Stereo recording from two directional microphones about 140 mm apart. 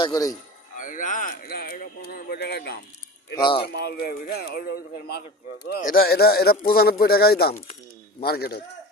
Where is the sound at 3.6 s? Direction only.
90° left.